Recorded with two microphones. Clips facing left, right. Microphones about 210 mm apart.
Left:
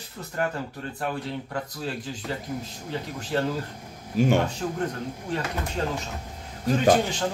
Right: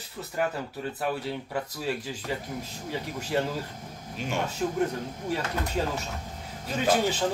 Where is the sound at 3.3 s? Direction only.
10° right (ahead or behind).